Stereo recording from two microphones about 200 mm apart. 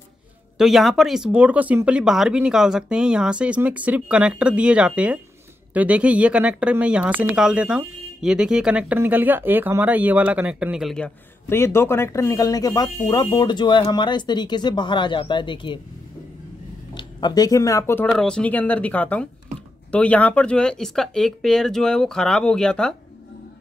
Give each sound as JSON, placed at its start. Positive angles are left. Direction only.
{"t": 0.6, "sound": "speech", "side_deg": 0}
{"t": 11.4, "sound": "speech", "side_deg": 10}
{"t": 16.9, "sound": "speech", "side_deg": 20}
{"t": 18.1, "sound": "speech", "side_deg": 5}